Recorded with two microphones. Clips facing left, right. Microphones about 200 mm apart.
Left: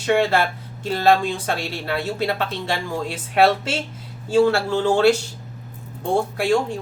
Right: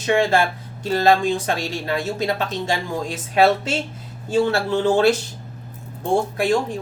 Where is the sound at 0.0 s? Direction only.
15° right (ahead or behind).